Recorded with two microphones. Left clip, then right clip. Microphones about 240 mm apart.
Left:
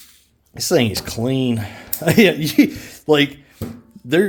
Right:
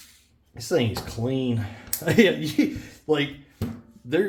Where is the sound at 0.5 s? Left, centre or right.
Left.